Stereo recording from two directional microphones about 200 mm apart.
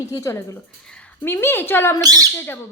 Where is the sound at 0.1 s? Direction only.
15° left (ahead or behind).